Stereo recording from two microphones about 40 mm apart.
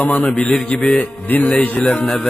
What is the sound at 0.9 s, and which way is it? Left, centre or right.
Speech, left.